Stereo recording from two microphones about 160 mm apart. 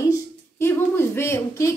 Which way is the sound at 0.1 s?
15° left (ahead or behind).